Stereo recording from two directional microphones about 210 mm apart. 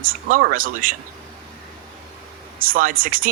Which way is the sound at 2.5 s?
40° right (ahead or behind).